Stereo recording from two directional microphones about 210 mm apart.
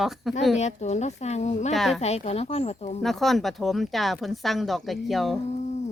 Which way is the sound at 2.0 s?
30° left (ahead or behind).